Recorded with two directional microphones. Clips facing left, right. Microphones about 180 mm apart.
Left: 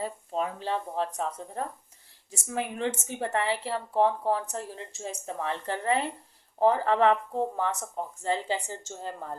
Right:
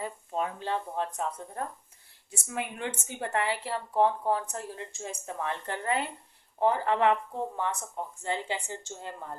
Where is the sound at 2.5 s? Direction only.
30° left (ahead or behind).